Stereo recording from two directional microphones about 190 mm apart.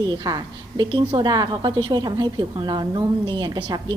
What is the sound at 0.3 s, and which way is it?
A woman's voice, 20° right (ahead or behind).